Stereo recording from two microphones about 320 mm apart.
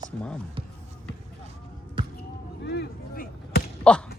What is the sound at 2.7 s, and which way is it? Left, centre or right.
Whip, left.